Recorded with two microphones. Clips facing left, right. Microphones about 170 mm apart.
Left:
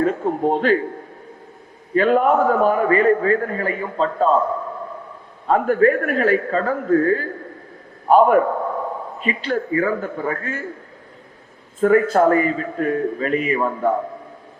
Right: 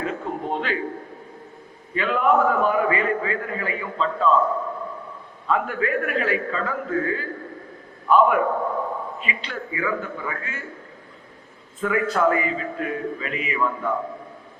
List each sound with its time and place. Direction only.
0.0 s a man's voice: 45° left (ahead or behind)
2.0 s a man's voice: 45° left (ahead or behind)
5.5 s a man's voice: 45° left (ahead or behind)
11.8 s a man's voice: 45° left (ahead or behind)